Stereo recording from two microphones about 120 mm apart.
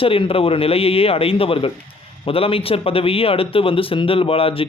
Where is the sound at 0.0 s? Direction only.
50° left (ahead or behind).